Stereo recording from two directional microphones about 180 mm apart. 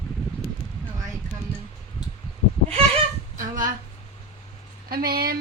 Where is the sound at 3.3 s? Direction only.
50° right (ahead or behind).